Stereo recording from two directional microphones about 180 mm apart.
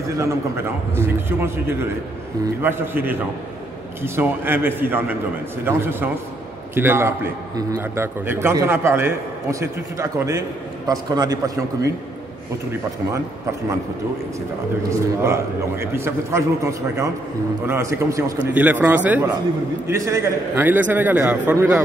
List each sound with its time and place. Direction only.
0.2 s a man's voice: 15° right (ahead or behind)
14.9 s a man's voice: 15° right (ahead or behind)